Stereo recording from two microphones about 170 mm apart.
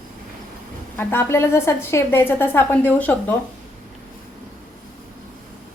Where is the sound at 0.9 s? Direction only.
15° left (ahead or behind).